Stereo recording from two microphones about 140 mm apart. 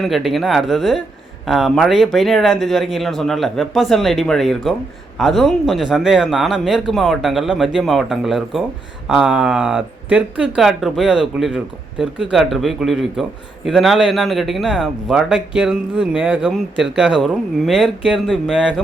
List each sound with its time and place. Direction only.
0.0 s a man's voice: centre (ahead or behind)